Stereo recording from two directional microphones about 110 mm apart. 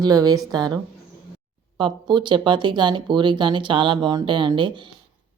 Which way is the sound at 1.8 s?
45° right (ahead or behind).